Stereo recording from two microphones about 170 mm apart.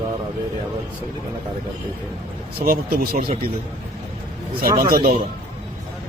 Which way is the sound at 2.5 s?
60° right (ahead or behind).